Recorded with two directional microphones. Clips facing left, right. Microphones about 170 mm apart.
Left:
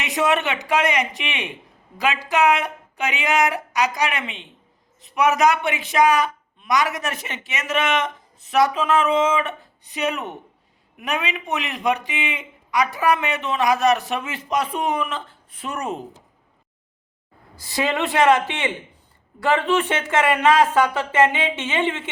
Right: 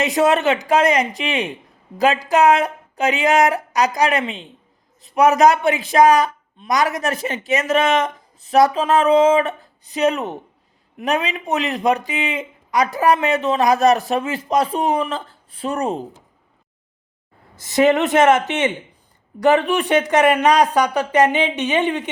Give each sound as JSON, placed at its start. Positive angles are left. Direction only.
{"t": 0.0, "sound": "a woman's voice", "side_deg": -35}
{"t": 17.7, "sound": "a woman's voice", "side_deg": -20}